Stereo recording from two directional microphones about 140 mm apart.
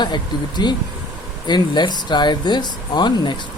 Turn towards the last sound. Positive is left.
turn(degrees=35)  # may be behind; listen again after turning